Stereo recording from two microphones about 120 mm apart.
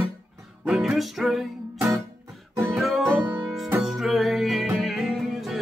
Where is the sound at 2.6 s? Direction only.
Centre (ahead or behind).